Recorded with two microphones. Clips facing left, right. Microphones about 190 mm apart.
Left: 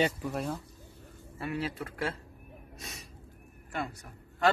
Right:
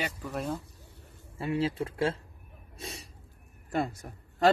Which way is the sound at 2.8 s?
30° right (ahead or behind).